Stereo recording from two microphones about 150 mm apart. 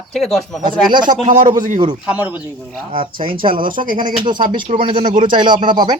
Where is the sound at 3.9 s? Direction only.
30° right (ahead or behind).